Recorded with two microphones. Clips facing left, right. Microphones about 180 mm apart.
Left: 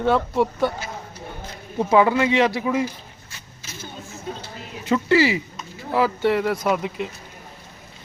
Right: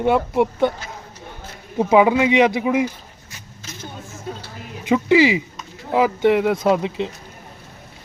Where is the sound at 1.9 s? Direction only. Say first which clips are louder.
Right 3 dB; 15° right (ahead or behind).